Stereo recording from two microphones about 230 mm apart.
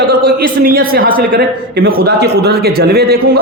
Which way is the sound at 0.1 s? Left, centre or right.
Right.